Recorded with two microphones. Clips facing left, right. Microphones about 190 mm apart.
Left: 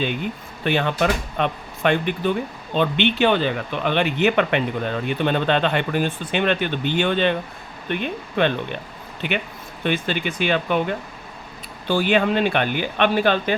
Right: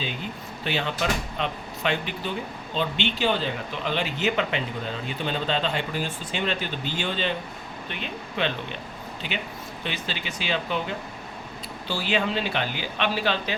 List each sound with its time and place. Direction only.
0.6 s speech: 55° left (ahead or behind)